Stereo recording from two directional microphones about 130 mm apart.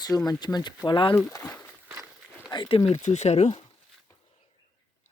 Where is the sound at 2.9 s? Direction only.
65° left (ahead or behind).